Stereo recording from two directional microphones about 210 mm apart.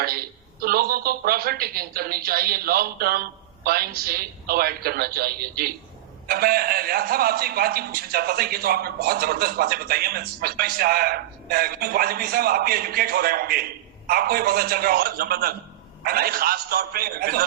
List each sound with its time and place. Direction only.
0.6 s a man's voice: 45° right (ahead or behind)